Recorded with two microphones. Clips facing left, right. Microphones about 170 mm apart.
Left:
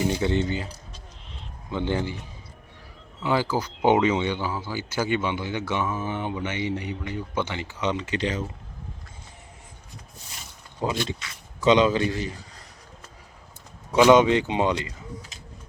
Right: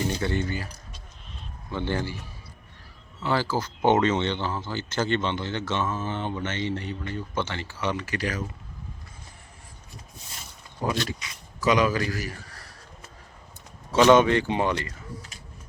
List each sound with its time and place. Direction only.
0.0 s speech: 15° left (ahead or behind)
1.7 s speech: 15° left (ahead or behind)
3.2 s speech: 15° left (ahead or behind)
10.8 s a man's voice: 20° left (ahead or behind)
13.9 s speech: 15° left (ahead or behind)